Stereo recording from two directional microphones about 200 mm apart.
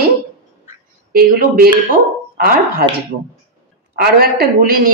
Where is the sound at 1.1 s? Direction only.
45° right (ahead or behind).